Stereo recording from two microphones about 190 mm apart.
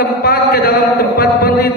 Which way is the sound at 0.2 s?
55° left (ahead or behind).